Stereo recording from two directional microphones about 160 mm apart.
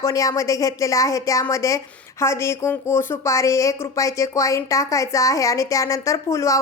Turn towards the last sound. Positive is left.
turn(degrees=20)  # may be behind; listen again after turning